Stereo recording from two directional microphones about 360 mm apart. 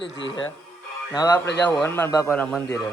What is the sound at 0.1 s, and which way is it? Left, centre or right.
Speech, left.